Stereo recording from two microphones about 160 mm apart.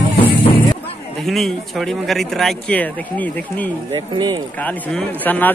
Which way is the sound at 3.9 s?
30° right (ahead or behind).